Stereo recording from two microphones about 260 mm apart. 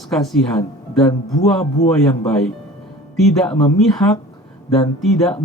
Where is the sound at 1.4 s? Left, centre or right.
Left.